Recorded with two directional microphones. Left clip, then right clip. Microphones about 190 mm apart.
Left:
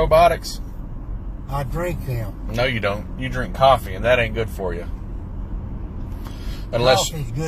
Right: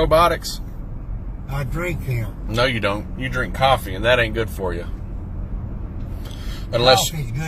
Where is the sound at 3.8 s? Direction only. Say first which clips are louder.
Right 1 dB; 30° right (ahead or behind).